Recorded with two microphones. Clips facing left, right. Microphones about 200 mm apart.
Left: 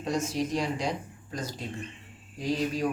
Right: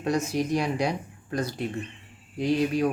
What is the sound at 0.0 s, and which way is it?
Speech, 65° right (ahead or behind).